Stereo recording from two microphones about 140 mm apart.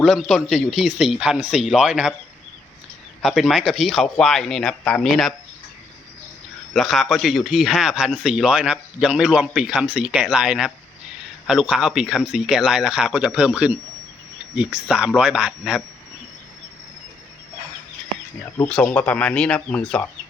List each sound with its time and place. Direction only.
0.0 s speech: centre (ahead or behind)
3.2 s speech: 5° right (ahead or behind)
6.7 s speech: centre (ahead or behind)
18.7 s speech: 5° left (ahead or behind)